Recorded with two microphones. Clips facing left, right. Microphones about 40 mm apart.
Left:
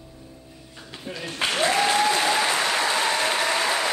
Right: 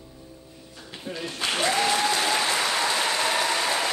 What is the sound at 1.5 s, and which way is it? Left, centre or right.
Applause, centre.